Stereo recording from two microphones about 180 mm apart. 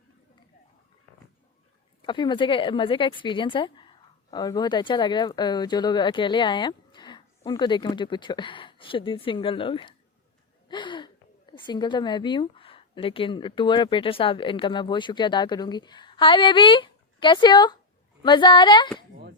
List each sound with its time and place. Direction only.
2.0 s a woman's voice: 25° left (ahead or behind)